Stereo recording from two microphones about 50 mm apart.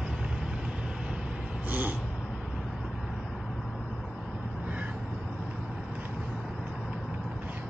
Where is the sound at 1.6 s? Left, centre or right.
Right.